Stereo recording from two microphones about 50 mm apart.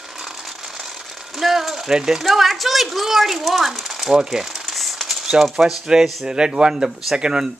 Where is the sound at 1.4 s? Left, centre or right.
Centre.